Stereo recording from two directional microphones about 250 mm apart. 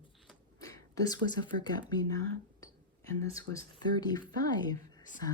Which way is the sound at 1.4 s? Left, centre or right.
Centre.